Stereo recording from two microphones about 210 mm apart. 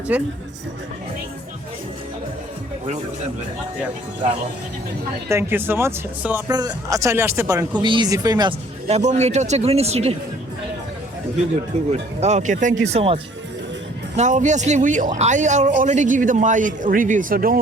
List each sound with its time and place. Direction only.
0.1 s speech: 5° right (ahead or behind)
5.3 s speech: 10° right (ahead or behind)
8.9 s a man's voice: 30° right (ahead or behind)
11.9 s a man's voice: 30° right (ahead or behind)
14.2 s a man's voice: 35° right (ahead or behind)